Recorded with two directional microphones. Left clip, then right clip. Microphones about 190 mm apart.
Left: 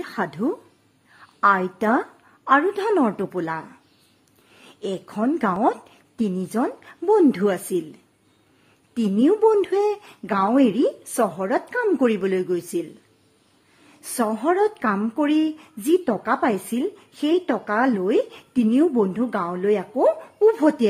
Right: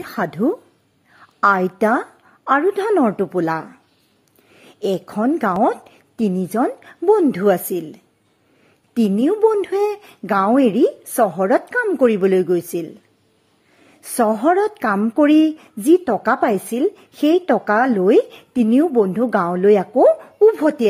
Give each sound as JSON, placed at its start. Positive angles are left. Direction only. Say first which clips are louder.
{"t": 0.0, "sound": "a woman's voice", "louder": "right 5 dB", "side_deg": -20}
{"t": 14.0, "sound": "a woman's voice", "louder": "right 6 dB", "side_deg": -20}